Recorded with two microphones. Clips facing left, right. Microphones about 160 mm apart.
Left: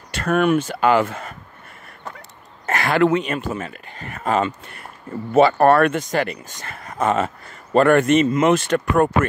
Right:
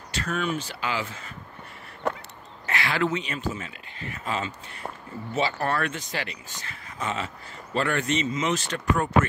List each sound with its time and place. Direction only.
0.1 s speech: 55° left (ahead or behind)
2.0 s a sound: 70° right (ahead or behind)
2.6 s speech: 45° left (ahead or behind)